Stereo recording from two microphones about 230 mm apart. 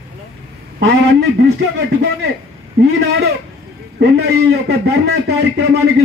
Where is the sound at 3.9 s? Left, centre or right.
Right.